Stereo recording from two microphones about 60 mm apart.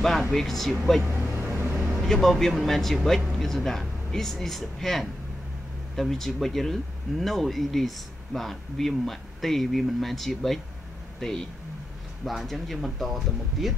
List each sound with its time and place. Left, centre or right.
0.0 s speech: centre
2.0 s speech: centre